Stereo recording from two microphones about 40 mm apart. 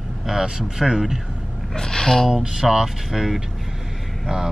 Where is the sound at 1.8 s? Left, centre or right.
Centre.